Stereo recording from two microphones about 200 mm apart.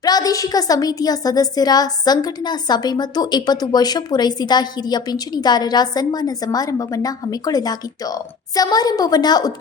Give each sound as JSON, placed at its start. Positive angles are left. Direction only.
{"t": 0.0, "sound": "a woman's voice", "side_deg": 20}